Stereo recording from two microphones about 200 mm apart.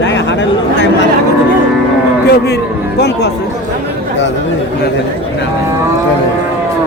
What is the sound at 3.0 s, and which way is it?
Speech, 55° left (ahead or behind).